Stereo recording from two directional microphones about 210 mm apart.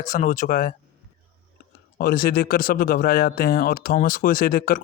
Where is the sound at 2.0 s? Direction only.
45° left (ahead or behind).